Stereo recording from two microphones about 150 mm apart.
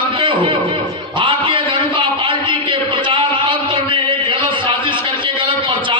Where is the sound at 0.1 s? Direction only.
35° right (ahead or behind).